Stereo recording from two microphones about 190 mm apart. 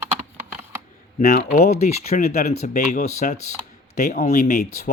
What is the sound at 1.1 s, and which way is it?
Speech, 45° left (ahead or behind).